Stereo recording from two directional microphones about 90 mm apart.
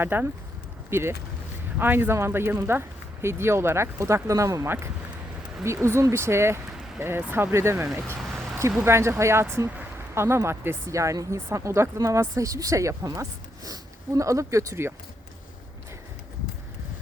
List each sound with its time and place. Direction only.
0.0 s speech: 25° right (ahead or behind)